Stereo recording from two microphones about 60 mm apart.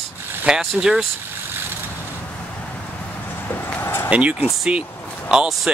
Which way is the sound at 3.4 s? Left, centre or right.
Left.